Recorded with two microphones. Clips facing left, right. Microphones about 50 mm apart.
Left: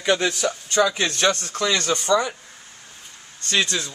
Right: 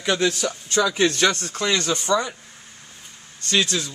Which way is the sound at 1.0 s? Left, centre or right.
Left.